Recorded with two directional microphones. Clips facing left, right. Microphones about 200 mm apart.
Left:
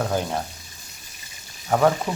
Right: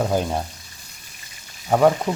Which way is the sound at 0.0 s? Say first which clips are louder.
Right 3 dB; 15° right (ahead or behind).